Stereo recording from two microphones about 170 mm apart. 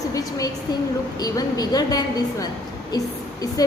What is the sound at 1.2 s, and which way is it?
A woman's voice, 20° left (ahead or behind).